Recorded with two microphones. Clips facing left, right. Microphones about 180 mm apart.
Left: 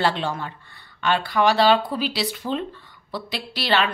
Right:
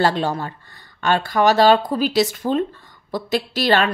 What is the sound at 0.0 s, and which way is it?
A woman's voice, 40° right (ahead or behind).